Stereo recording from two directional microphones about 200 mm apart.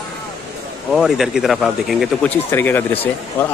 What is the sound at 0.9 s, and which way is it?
A man's voice, centre (ahead or behind).